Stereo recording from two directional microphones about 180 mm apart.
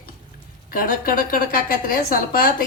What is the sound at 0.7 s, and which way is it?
A woman's voice, 55° left (ahead or behind).